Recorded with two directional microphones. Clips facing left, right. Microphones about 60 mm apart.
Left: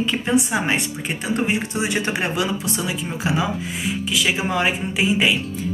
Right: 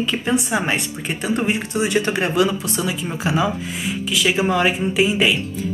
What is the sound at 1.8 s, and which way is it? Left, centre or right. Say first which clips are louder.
Speech: right 3 dB; centre.